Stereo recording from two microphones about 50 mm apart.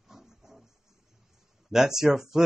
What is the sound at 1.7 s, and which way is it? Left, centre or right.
Speech, centre.